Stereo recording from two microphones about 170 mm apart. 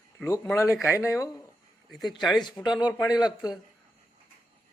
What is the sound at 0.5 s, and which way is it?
Speech, 15° left (ahead or behind).